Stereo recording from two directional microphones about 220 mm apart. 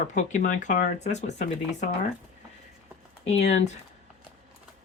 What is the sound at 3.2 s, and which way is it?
Speech, 30° left (ahead or behind).